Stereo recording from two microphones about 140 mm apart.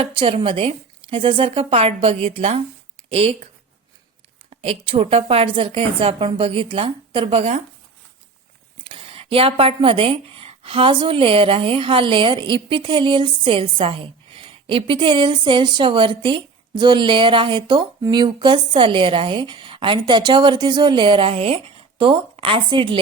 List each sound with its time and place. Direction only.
0.2 s speech: 40° right (ahead or behind)
8.8 s speech: 40° right (ahead or behind)